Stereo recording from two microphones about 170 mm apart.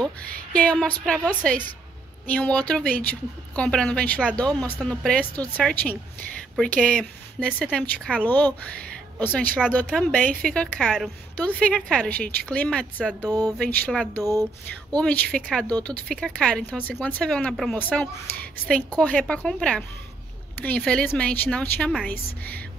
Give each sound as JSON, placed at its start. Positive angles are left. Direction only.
{"t": 0.5, "sound": "a woman's voice", "side_deg": 5}
{"t": 2.8, "sound": "speech", "side_deg": -60}
{"t": 3.1, "sound": "a woman's voice", "side_deg": 5}
{"t": 13.3, "sound": "a sound", "side_deg": -20}
{"t": 13.6, "sound": "speech", "side_deg": 5}
{"t": 14.1, "sound": "a sound", "side_deg": -20}
{"t": 15.0, "sound": "a woman's voice", "side_deg": 5}